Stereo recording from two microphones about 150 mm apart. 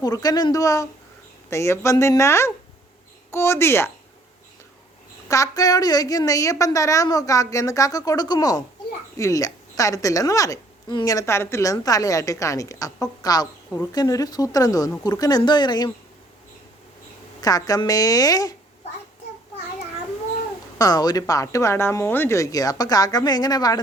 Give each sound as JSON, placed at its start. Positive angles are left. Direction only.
{"t": 0.0, "sound": "a woman's voice", "side_deg": 25}
{"t": 5.3, "sound": "a woman's voice", "side_deg": 25}
{"t": 17.4, "sound": "a woman's voice", "side_deg": 25}
{"t": 20.7, "sound": "a woman's voice", "side_deg": 25}